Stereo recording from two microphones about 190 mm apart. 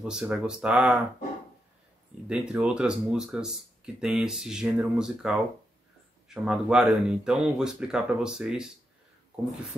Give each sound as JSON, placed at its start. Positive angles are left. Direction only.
{"t": 0.0, "sound": "speech", "side_deg": -5}
{"t": 2.2, "sound": "speech", "side_deg": -5}